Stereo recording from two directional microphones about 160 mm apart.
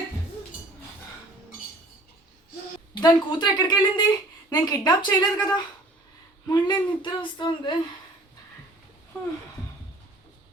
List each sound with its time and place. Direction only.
2.9 s speech: 25° left (ahead or behind)